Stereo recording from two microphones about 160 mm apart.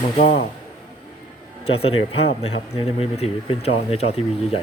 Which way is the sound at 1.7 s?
35° left (ahead or behind).